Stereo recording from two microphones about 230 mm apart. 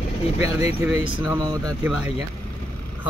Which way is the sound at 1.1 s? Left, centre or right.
Centre.